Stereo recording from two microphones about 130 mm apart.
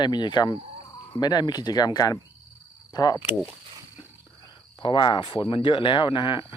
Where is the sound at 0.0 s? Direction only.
35° left (ahead or behind).